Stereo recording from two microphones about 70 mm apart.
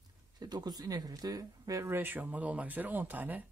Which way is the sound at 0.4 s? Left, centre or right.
Right.